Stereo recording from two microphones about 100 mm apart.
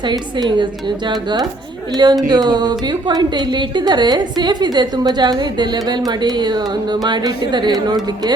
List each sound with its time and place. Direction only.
0.0 s a woman's voice: 50° right (ahead or behind)